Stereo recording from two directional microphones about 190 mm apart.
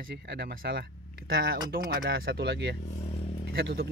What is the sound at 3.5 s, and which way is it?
Speech, 55° right (ahead or behind).